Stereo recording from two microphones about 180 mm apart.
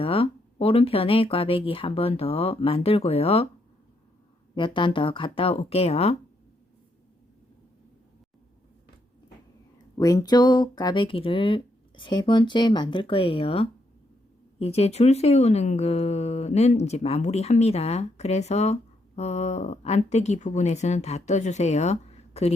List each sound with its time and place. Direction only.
0.0 s speech: 30° left (ahead or behind)
4.5 s speech: 25° left (ahead or behind)
9.7 s speech: 20° left (ahead or behind); by 22.5 s 35° left (ahead or behind)